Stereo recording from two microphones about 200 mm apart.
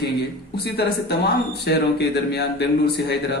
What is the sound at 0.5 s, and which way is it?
Speech, 55° left (ahead or behind).